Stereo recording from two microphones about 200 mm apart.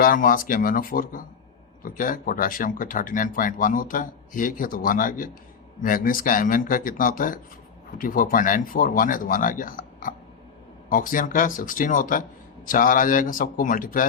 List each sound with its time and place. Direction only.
0.0 s speech: 45° left (ahead or behind)